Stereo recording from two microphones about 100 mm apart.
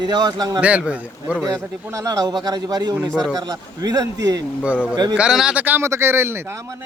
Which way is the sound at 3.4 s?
40° right (ahead or behind).